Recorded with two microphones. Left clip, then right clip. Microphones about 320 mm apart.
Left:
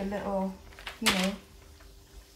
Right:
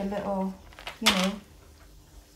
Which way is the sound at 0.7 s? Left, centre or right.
Centre.